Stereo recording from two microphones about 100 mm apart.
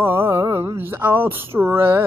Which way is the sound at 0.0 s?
25° right (ahead or behind).